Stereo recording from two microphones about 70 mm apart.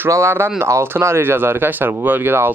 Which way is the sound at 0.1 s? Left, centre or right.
Right.